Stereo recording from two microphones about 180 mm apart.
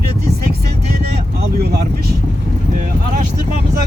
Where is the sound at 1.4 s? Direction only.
60° right (ahead or behind).